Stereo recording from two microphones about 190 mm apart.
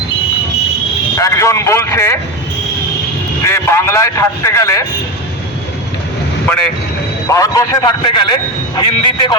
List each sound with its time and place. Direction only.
1.2 s a man's voice: 15° left (ahead or behind)
3.4 s a man's voice: 15° left (ahead or behind)
7.3 s a man's voice: 20° left (ahead or behind)